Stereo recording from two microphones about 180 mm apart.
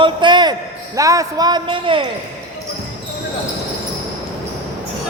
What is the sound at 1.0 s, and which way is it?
Speech, 20° right (ahead or behind).